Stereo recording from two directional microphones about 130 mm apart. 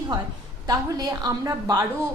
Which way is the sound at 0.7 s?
30° right (ahead or behind).